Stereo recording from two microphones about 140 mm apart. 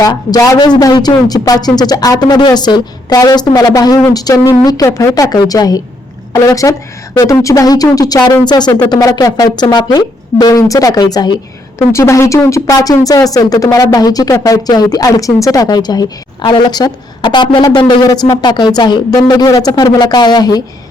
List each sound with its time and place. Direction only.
0.0 s speech: 30° left (ahead or behind)
11.9 s speech: 20° left (ahead or behind)